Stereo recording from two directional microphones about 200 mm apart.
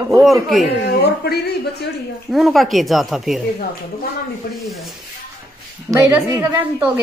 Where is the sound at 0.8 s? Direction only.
55° left (ahead or behind).